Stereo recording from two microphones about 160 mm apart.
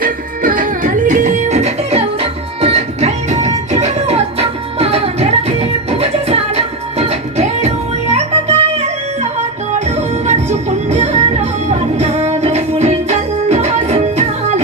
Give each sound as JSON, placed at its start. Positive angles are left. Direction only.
{"t": 0.0, "sound": "music", "side_deg": -60}